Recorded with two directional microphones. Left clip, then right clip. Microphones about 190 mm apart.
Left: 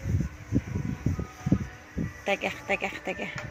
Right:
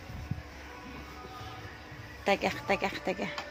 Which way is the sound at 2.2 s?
15° right (ahead or behind).